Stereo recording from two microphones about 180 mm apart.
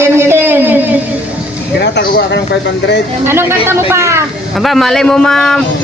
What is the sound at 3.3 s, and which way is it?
Speech, 15° right (ahead or behind).